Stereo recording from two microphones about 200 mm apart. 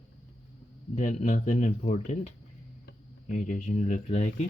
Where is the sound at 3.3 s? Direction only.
35° left (ahead or behind).